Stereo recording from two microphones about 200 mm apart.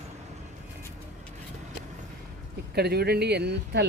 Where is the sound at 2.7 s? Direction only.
55° right (ahead or behind).